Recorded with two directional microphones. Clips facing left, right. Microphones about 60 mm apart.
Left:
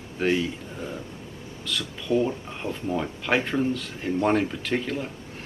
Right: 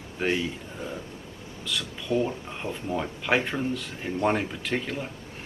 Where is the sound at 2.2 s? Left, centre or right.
Centre.